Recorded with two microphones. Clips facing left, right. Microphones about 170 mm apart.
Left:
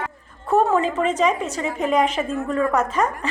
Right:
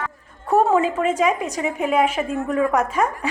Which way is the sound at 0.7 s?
5° right (ahead or behind).